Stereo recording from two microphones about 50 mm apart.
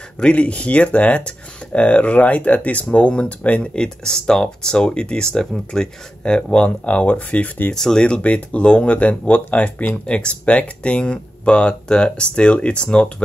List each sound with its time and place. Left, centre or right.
0.2 s speech: left
7.7 s speech: centre